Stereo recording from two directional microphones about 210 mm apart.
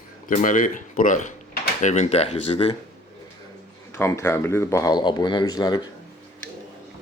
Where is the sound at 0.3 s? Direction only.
40° left (ahead or behind).